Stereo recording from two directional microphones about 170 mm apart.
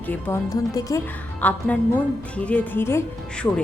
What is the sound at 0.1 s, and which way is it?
Speech, 20° left (ahead or behind).